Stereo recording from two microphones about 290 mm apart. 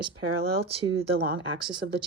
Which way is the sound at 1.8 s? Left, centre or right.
Right.